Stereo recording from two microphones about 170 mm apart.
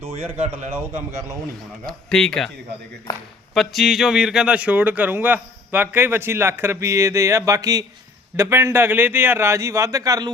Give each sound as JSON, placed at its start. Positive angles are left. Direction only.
{"t": 0.7, "sound": "speech", "side_deg": -15}
{"t": 1.9, "sound": "speech", "side_deg": 5}
{"t": 3.5, "sound": "speech", "side_deg": 0}